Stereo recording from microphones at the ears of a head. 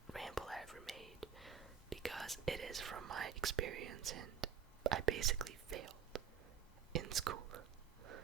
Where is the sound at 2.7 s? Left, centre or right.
Right.